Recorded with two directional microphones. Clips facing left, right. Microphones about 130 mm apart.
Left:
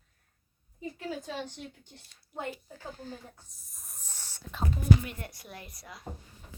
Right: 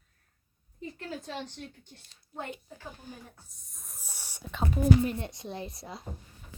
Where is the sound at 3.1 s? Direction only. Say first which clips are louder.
Left 3 dB; 15° right (ahead or behind).